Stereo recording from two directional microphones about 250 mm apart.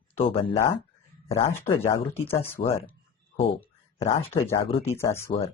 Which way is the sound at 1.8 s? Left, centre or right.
Centre.